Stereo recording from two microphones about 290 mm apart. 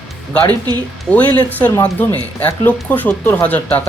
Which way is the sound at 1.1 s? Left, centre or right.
Centre.